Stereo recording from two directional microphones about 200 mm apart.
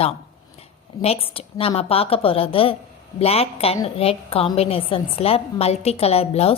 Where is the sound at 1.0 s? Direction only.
30° left (ahead or behind).